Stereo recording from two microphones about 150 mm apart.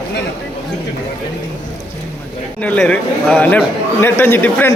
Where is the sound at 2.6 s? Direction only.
5° left (ahead or behind).